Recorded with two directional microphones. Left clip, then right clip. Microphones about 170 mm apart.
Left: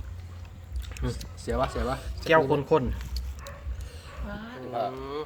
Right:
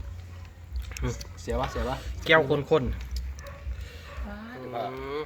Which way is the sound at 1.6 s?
Centre (ahead or behind).